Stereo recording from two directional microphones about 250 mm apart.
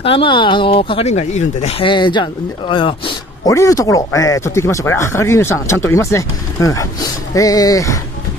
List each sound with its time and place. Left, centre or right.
0.0 s speech: left